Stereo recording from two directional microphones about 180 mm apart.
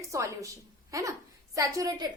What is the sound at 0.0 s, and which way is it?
A woman's voice, 15° right (ahead or behind).